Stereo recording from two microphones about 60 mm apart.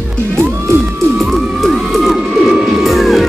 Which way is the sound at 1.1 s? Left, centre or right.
Centre.